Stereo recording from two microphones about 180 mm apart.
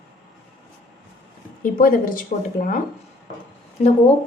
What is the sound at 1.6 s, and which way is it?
A woman's voice, 50° left (ahead or behind).